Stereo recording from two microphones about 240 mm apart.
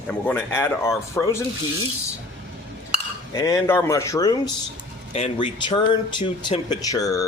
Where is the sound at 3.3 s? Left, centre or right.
Centre.